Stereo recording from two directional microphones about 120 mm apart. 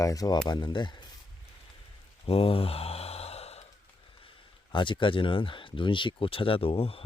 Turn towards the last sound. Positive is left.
turn(degrees=50)  # may be behind; listen again after turning